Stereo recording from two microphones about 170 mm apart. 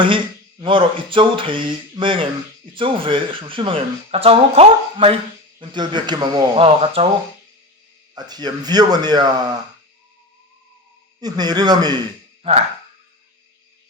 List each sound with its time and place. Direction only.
0.6 s speech: 30° right (ahead or behind)
8.1 s speech: 25° right (ahead or behind)
11.2 s speech: 25° right (ahead or behind)
12.4 s speech: 35° right (ahead or behind)